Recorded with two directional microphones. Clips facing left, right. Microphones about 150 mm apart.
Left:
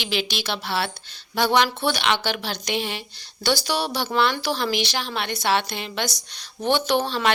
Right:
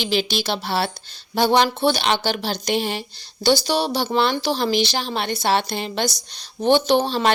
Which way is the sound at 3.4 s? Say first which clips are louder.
Right 5 dB; 25° right (ahead or behind).